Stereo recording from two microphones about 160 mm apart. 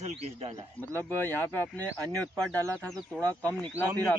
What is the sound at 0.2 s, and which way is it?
Speech, 40° right (ahead or behind).